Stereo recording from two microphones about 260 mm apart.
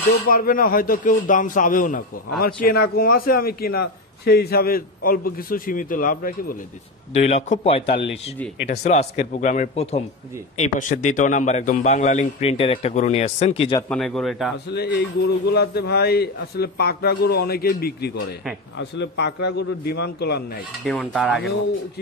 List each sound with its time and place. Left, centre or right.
0.3 s a man's voice: left
13.7 s speech: centre
14.7 s a man's voice: left
20.8 s speech: centre